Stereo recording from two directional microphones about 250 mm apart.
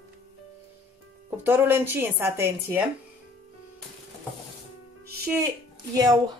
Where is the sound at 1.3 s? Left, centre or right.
Centre.